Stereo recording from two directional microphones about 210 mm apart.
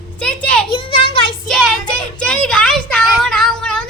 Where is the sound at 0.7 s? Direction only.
25° left (ahead or behind).